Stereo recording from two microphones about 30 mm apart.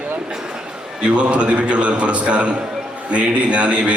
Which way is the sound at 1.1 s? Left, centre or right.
Right.